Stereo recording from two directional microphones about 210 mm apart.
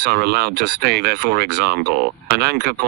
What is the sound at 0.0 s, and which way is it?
Speech, 50° right (ahead or behind).